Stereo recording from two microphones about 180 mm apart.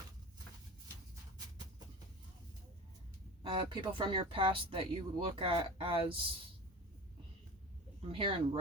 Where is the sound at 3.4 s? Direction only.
30° right (ahead or behind).